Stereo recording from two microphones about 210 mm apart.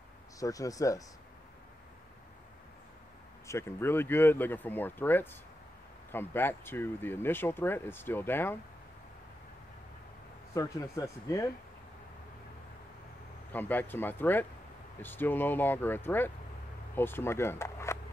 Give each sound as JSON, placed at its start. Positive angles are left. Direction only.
{"t": 0.4, "sound": "speech", "side_deg": 15}
{"t": 3.4, "sound": "speech", "side_deg": 15}
{"t": 10.5, "sound": "speech", "side_deg": 15}
{"t": 13.5, "sound": "speech", "side_deg": 10}